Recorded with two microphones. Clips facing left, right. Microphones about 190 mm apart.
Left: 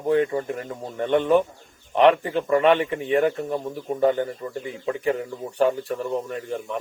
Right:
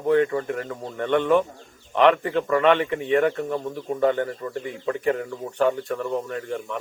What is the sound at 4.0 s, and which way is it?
Speech, 30° left (ahead or behind).